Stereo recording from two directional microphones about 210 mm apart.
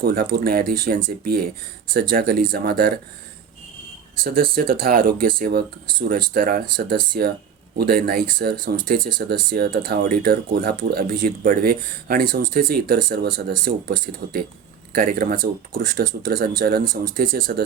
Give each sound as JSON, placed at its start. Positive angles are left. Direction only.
{"t": 0.0, "sound": "speech", "side_deg": -45}
{"t": 4.2, "sound": "speech", "side_deg": -45}